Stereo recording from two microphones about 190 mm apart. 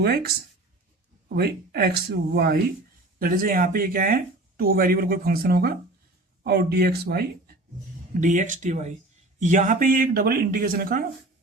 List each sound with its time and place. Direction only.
0.0 s speech: 55° right (ahead or behind)
8.2 s speech: 40° right (ahead or behind)